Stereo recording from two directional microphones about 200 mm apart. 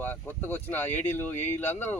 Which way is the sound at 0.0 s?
10° left (ahead or behind).